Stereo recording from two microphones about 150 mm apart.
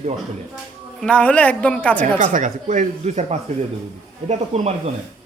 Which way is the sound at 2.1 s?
55° right (ahead or behind).